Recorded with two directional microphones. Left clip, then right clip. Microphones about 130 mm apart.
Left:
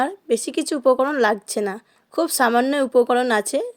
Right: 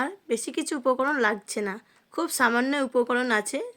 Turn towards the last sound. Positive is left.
turn(degrees=25)  # may be behind; listen again after turning